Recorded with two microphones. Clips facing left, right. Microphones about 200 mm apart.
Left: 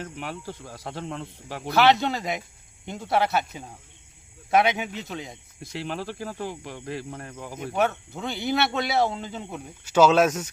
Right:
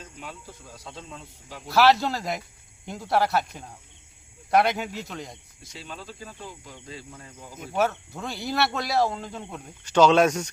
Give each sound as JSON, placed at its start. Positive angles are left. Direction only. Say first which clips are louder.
{"t": 0.0, "sound": "speech", "louder": "left 7 dB", "side_deg": 75}
{"t": 1.7, "sound": "speech", "louder": "even", "side_deg": 0}
{"t": 5.7, "sound": "speech", "louder": "left 9 dB", "side_deg": 75}
{"t": 7.7, "sound": "speech", "louder": "even", "side_deg": 0}